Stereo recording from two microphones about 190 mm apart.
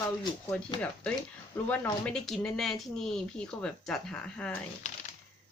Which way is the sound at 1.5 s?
10° left (ahead or behind).